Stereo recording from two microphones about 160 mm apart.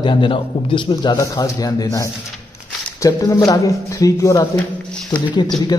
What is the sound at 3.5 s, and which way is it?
A man's voice, 20° left (ahead or behind).